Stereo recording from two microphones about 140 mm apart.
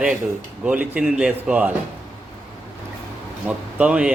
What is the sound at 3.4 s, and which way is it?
Speech, 10° right (ahead or behind).